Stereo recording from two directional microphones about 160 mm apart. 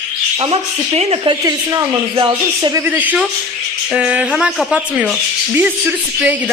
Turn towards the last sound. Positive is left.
turn(degrees=-5)  # may be behind; listen again after turning